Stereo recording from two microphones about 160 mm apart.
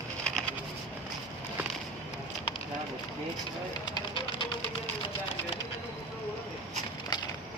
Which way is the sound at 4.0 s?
30° left (ahead or behind).